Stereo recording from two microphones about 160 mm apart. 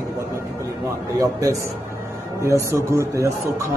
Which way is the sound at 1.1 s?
20° right (ahead or behind).